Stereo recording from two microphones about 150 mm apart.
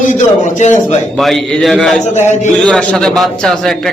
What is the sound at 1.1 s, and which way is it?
A man's voice, centre (ahead or behind).